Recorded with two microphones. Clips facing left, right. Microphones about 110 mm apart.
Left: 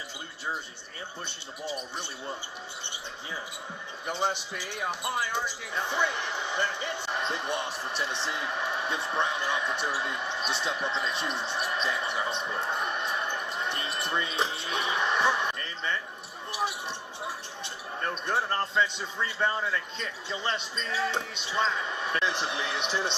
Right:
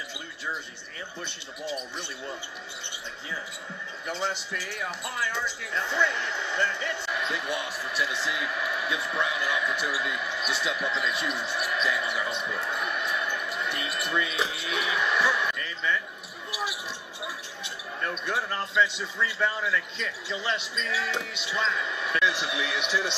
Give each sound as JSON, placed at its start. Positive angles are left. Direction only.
{"t": 4.1, "sound": "speech", "side_deg": 15}
{"t": 6.3, "sound": "speech", "side_deg": 15}
{"t": 7.1, "sound": "a man's voice", "side_deg": 35}
{"t": 12.4, "sound": "basketball bounce", "side_deg": 30}
{"t": 14.5, "sound": "speech", "side_deg": 30}
{"t": 18.0, "sound": "a man's voice", "side_deg": 40}
{"t": 19.2, "sound": "a man's voice", "side_deg": 25}
{"t": 19.7, "sound": "a man's voice", "side_deg": 40}